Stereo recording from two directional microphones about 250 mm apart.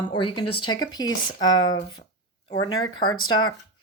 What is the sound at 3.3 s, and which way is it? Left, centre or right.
Speech, centre.